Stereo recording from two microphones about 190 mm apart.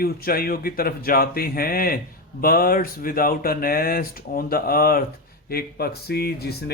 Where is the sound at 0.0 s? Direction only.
50° left (ahead or behind).